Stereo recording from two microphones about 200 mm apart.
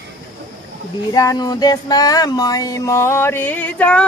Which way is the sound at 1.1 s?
20° left (ahead or behind).